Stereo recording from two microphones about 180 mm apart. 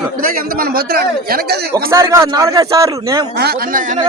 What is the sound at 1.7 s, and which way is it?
A man's voice, 15° right (ahead or behind).